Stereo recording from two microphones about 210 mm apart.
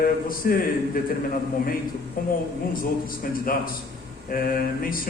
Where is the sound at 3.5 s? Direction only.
45° left (ahead or behind).